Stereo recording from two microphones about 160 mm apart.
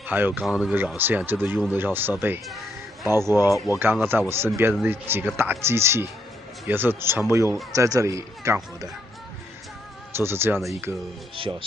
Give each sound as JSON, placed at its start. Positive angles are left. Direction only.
{"t": 0.0, "sound": "speech", "side_deg": -10}
{"t": 2.4, "sound": "a sound", "side_deg": 0}
{"t": 3.1, "sound": "speech", "side_deg": -15}
{"t": 3.3, "sound": "speech", "side_deg": 20}
{"t": 4.1, "sound": "speech", "side_deg": -10}
{"t": 10.1, "sound": "speech", "side_deg": -15}